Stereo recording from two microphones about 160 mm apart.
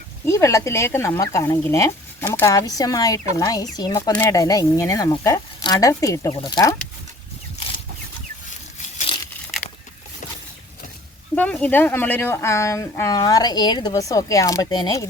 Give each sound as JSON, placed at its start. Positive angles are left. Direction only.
{"t": 0.3, "sound": "speech", "side_deg": 20}
{"t": 11.3, "sound": "speech", "side_deg": 10}